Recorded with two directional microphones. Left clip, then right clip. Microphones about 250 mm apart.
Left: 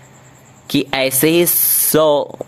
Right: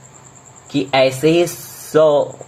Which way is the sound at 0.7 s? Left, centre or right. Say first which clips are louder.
Right 2 dB; left.